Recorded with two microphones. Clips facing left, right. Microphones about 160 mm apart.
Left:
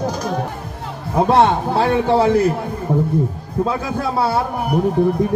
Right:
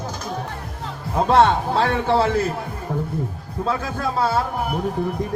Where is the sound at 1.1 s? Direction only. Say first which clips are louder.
Left 2 dB; 15° left (ahead or behind).